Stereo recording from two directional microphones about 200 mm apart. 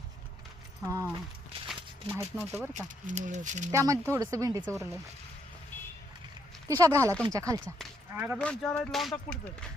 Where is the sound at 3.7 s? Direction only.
15° right (ahead or behind).